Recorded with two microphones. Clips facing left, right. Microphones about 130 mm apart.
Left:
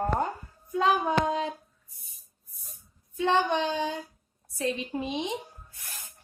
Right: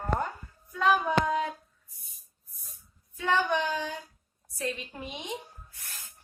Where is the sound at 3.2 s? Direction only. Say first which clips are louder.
Left 2 dB; 25° left (ahead or behind).